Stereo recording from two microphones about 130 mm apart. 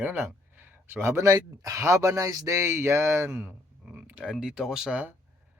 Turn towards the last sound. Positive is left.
turn(degrees=-10)  # may be behind; listen again after turning